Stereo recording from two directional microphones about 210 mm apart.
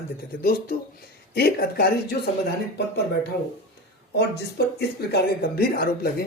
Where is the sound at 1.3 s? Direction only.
50° left (ahead or behind).